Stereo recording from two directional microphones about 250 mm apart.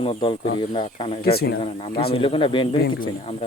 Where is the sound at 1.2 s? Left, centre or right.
Left.